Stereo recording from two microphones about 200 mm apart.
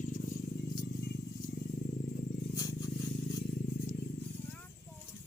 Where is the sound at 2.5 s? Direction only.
15° left (ahead or behind).